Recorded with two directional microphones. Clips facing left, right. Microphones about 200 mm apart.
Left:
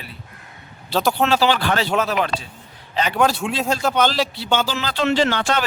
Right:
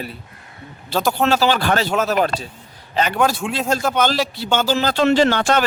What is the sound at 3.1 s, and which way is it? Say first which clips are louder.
A man's voice: left 2 dB; centre (ahead or behind).